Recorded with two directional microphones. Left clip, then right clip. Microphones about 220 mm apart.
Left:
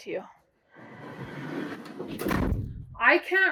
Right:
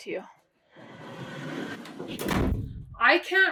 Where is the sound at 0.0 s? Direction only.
10° right (ahead or behind).